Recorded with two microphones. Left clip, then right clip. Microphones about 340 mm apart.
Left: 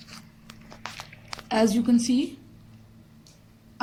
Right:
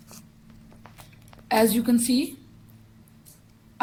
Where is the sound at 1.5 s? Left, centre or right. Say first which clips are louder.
Right 2 dB; centre.